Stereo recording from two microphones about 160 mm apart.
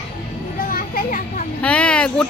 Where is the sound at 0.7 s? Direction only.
60° left (ahead or behind).